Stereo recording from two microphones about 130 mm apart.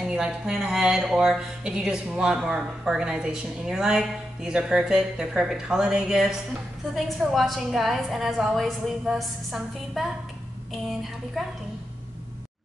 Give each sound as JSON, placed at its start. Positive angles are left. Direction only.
{"t": 0.0, "sound": "speech", "side_deg": -5}